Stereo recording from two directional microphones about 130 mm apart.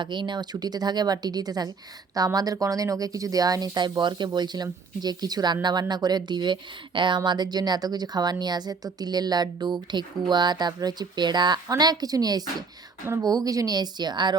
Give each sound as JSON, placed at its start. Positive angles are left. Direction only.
{"t": 0.0, "sound": "speech", "side_deg": -35}